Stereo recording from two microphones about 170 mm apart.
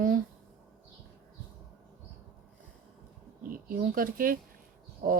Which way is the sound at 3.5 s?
55° right (ahead or behind).